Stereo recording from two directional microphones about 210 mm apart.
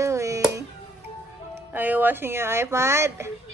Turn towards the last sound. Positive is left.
turn(degrees=-10)  # may be behind; listen again after turning